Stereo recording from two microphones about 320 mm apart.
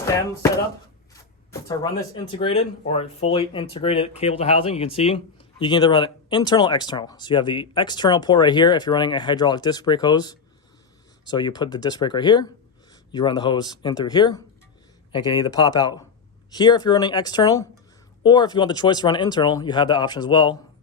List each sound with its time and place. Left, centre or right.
1.5 s speech: centre